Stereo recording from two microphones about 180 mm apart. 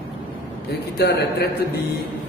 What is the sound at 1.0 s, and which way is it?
Speech, 65° left (ahead or behind).